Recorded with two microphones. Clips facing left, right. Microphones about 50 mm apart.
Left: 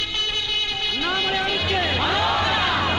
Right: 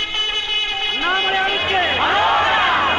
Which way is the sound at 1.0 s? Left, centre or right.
Right.